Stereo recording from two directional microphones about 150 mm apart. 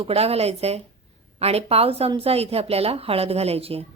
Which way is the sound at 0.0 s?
40° right (ahead or behind).